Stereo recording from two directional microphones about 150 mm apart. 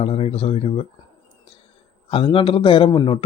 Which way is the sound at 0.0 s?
40° left (ahead or behind).